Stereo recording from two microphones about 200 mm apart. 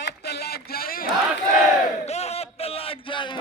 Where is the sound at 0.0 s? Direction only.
55° left (ahead or behind).